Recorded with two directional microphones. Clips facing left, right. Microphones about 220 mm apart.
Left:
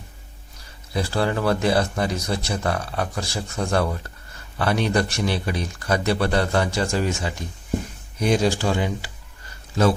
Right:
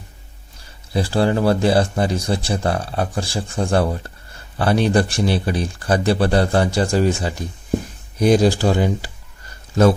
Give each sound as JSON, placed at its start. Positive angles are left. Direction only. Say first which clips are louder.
{"t": 0.9, "sound": "speech", "louder": "right 5 dB", "side_deg": -30}